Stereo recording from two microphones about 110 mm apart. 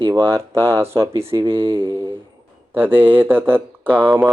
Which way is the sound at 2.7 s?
20° right (ahead or behind).